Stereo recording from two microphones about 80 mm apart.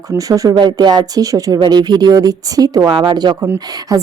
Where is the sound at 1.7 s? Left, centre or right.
Right.